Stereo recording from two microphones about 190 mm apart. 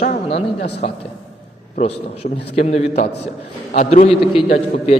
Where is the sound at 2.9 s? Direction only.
60° left (ahead or behind).